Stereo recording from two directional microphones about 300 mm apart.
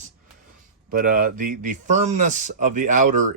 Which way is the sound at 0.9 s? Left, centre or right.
Right.